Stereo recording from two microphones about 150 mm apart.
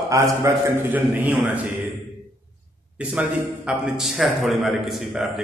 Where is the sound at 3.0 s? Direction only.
5° right (ahead or behind).